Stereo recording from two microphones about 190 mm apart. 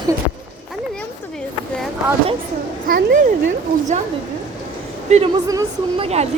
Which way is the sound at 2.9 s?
50° right (ahead or behind).